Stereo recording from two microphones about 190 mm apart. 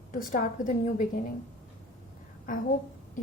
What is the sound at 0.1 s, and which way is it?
A woman's voice, 45° left (ahead or behind).